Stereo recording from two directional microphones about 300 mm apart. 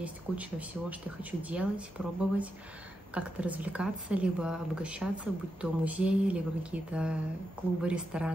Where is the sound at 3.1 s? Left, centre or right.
Centre.